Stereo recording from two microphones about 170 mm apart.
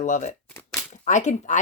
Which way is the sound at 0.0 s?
50° left (ahead or behind).